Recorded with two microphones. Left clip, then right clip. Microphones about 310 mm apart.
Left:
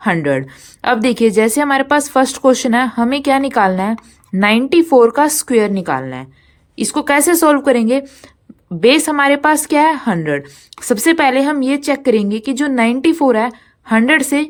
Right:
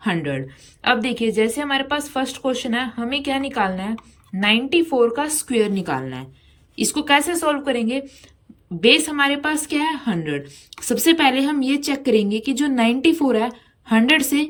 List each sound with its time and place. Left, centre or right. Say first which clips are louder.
0.0 s a woman's voice: left 9 dB; centre